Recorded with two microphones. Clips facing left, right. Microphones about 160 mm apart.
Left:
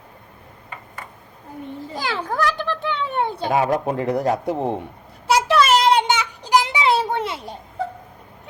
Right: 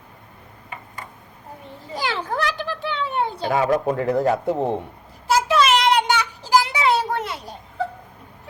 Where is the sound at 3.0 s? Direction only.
55° left (ahead or behind).